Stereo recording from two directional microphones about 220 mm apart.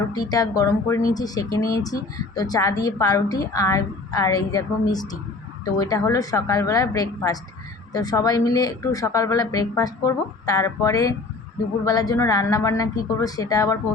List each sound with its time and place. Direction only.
0.1 s speech: 15° left (ahead or behind)